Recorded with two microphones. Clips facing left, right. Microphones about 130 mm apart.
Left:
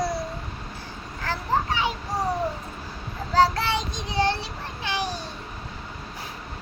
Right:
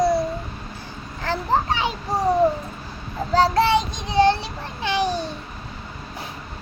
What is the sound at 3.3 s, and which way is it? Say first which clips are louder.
Child singing: right 4 dB; 25° right (ahead or behind).